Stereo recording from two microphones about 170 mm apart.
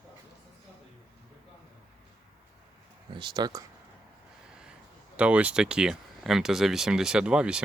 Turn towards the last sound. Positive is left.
turn(degrees=-5)  # may be behind; listen again after turning